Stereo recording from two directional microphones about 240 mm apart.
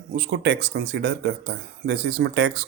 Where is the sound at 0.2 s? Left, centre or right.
Right.